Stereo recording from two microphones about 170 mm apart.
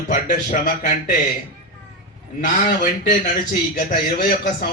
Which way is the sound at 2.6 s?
55° left (ahead or behind).